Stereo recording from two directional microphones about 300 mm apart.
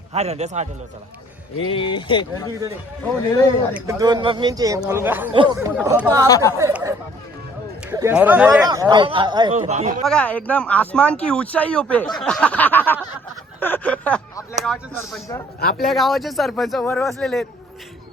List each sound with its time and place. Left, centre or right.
0.1 s a man's voice: right
1.5 s speech: centre
3.8 s speech: centre
6.2 s speech: centre
6.6 s speech: centre
10.0 s speech: centre